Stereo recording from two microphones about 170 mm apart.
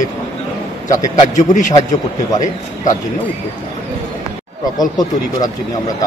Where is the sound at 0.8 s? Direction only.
45° left (ahead or behind).